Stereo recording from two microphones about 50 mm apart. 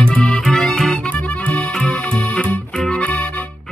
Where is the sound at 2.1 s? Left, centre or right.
Left.